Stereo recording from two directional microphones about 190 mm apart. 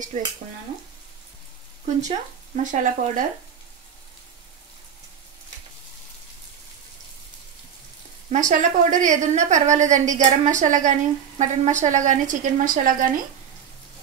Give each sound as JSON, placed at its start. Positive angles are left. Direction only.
{"t": 0.1, "sound": "a woman's voice", "side_deg": -35}
{"t": 2.5, "sound": "speech", "side_deg": -40}
{"t": 8.3, "sound": "a woman's voice", "side_deg": -40}